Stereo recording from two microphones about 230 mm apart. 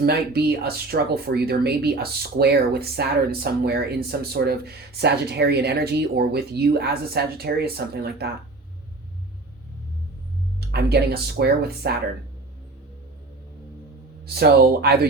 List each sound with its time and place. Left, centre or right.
0.0 s speech: right
10.6 s speech: right
14.3 s speech: right